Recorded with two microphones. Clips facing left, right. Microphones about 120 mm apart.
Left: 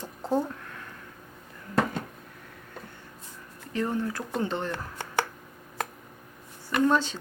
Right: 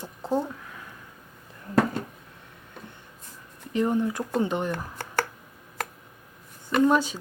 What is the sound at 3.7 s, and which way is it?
Speech, 15° right (ahead or behind).